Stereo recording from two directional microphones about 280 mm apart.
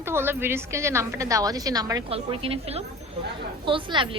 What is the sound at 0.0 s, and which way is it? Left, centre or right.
A woman's voice, centre.